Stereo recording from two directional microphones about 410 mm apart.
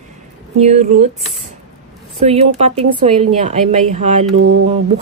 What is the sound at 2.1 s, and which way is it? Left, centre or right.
Speech, centre.